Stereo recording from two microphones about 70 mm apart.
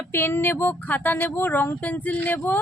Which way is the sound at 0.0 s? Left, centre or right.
Left.